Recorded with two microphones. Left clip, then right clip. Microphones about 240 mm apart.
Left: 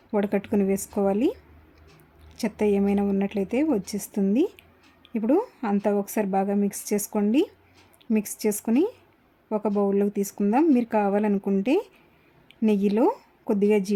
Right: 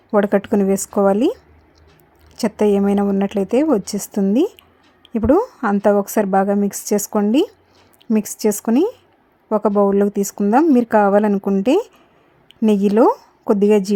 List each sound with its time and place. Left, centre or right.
0.1 s a woman's voice: right